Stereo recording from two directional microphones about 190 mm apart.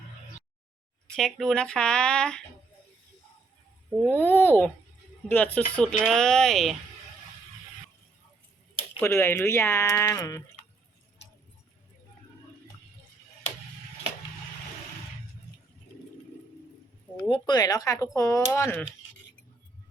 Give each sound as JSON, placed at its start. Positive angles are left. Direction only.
{"t": 1.1, "sound": "speech", "side_deg": 0}
{"t": 4.0, "sound": "speech", "side_deg": 10}
{"t": 9.0, "sound": "speech", "side_deg": 10}
{"t": 17.2, "sound": "speech", "side_deg": 25}